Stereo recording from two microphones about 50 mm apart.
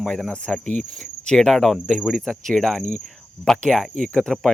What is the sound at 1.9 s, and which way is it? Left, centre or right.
Cricket, centre.